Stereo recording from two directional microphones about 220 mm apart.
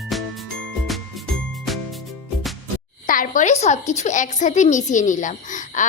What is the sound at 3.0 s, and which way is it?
A woman's voice, 35° left (ahead or behind).